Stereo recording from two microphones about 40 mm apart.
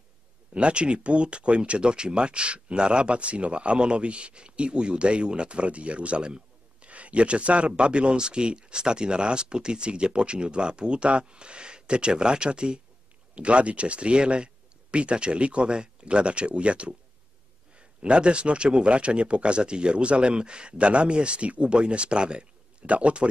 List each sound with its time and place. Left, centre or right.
0.6 s speech: right